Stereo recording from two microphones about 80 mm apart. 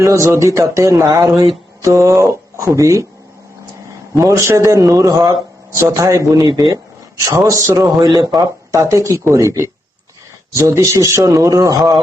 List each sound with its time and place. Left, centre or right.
0.0 s a man's voice: right
4.2 s a man's voice: right
8.0 s a man's voice: right
8.7 s a man's voice: right